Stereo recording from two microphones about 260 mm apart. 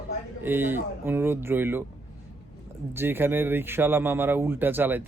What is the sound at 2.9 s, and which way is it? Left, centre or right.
Speech, centre.